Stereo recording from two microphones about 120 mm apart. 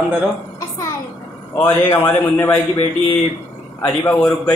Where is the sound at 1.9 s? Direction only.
20° left (ahead or behind).